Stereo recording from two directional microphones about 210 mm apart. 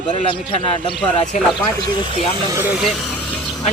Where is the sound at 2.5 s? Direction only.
10° right (ahead or behind).